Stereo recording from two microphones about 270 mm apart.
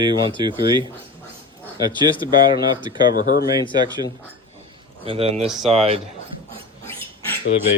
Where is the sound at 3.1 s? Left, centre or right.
Left.